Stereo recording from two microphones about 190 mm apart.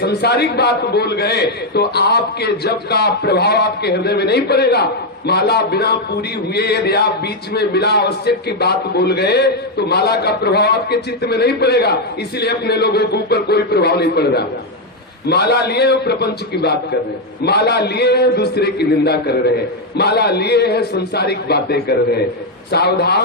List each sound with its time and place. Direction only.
0.0 s a man's voice: 60° left (ahead or behind)